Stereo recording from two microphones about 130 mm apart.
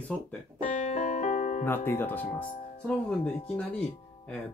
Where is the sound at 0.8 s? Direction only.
65° left (ahead or behind).